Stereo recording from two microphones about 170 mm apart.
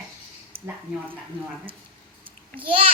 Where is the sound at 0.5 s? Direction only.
35° right (ahead or behind).